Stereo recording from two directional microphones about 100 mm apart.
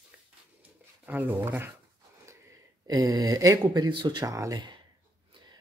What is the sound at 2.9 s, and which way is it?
Speech, 40° right (ahead or behind).